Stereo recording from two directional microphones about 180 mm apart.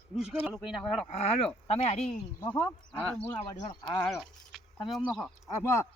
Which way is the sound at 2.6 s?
10° left (ahead or behind).